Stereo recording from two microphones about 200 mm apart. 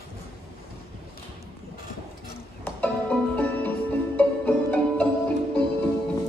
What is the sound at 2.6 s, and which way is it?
Music, 10° left (ahead or behind).